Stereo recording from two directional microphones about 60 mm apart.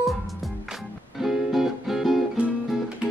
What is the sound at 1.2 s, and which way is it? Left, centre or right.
Music, centre.